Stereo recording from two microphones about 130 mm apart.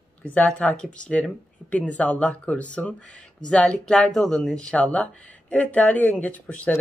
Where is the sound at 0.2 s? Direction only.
10° left (ahead or behind).